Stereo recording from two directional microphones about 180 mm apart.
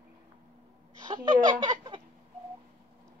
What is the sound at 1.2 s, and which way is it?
Fowl, 25° right (ahead or behind).